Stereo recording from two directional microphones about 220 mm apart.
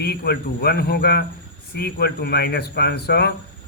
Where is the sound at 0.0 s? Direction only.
45° left (ahead or behind).